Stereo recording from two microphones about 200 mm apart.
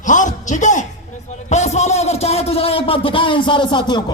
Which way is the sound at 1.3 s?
35° left (ahead or behind).